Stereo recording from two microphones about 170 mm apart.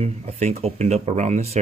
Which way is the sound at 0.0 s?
40° right (ahead or behind).